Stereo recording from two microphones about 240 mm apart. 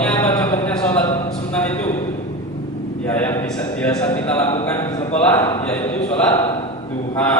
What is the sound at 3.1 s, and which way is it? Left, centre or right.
Speech, centre.